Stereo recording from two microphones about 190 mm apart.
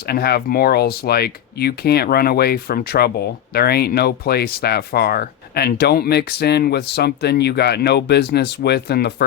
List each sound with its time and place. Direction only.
0.1 s speech: 55° left (ahead or behind)